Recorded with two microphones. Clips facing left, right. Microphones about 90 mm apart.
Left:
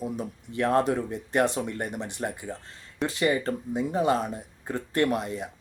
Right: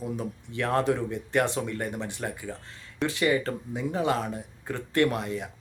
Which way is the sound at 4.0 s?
15° left (ahead or behind).